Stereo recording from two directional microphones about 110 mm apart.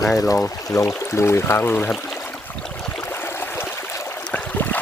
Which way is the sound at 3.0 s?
20° left (ahead or behind).